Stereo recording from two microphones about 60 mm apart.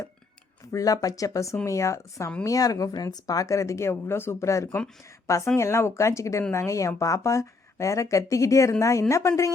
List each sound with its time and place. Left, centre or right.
0.7 s speech: left
2.4 s speech: left